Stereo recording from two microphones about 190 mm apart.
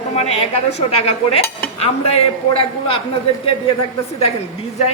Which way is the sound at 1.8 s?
30° left (ahead or behind).